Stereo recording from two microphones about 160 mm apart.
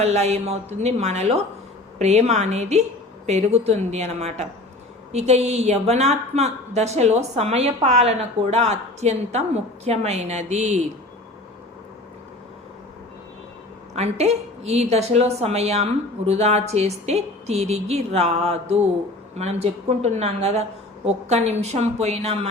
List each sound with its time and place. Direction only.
0.0 s a woman's voice: 45° right (ahead or behind)
13.9 s a woman's voice: 45° right (ahead or behind)